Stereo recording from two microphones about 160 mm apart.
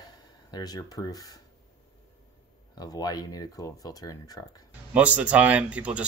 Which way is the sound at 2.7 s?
25° left (ahead or behind).